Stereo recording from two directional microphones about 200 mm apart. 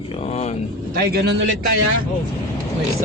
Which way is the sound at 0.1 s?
30° left (ahead or behind).